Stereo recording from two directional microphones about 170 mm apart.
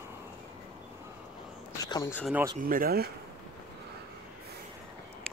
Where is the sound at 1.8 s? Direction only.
25° left (ahead or behind).